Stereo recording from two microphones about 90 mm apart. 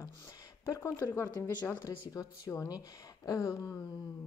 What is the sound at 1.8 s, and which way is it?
A woman's voice, 40° left (ahead or behind).